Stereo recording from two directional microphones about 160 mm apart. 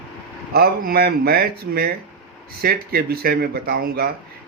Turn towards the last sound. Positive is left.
turn(degrees=-75)  # may be behind; listen again after turning